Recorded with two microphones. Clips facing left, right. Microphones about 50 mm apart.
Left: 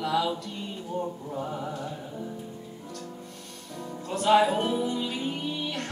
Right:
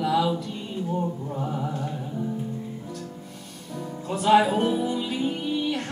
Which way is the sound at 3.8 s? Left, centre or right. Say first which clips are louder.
Right 2 dB; centre.